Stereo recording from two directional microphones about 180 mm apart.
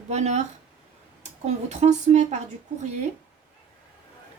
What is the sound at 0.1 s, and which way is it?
Speech, 40° right (ahead or behind).